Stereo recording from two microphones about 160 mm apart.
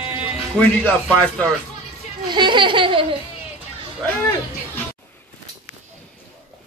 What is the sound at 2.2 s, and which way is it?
Laughter, 30° right (ahead or behind).